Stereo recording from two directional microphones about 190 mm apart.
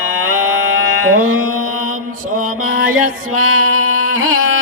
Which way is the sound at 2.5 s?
90° right.